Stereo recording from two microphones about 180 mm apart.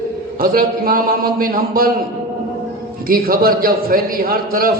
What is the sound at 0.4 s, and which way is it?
A man's voice, 55° right (ahead or behind).